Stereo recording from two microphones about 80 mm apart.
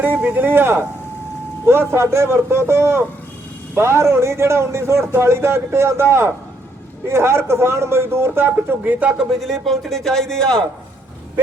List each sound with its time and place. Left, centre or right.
0.0 s a man's voice: right
9.4 s speech: centre